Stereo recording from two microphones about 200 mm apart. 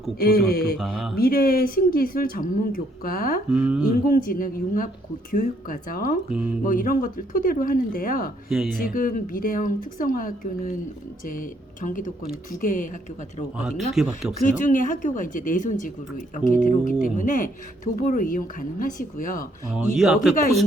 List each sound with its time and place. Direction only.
0.2 s speech: 50° left (ahead or behind)
0.8 s speech: centre (ahead or behind)
1.2 s speech: 45° left (ahead or behind)
3.5 s speech: 5° right (ahead or behind)
4.0 s speech: 45° left (ahead or behind)
8.4 s speech: centre (ahead or behind)
8.8 s a woman's voice: 45° left (ahead or behind)
13.6 s speech: centre (ahead or behind)
14.4 s a woman's voice: 40° left (ahead or behind)
19.7 s speech: centre (ahead or behind)